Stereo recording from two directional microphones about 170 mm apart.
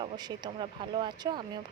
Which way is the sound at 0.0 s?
25° right (ahead or behind).